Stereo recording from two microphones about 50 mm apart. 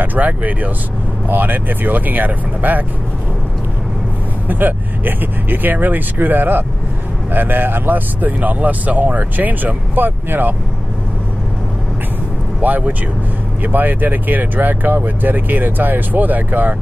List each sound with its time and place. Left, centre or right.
0.0 s speech: right
4.5 s speech: right
12.6 s speech: right